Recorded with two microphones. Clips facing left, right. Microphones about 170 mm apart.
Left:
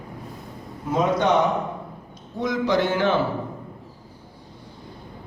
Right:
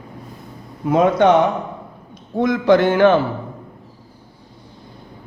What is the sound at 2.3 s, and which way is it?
Speech, 55° right (ahead or behind).